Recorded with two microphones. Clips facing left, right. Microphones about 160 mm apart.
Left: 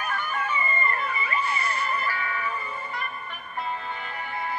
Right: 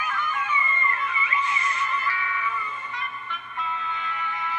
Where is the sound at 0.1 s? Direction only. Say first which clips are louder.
Right 1 dB; 40° left (ahead or behind).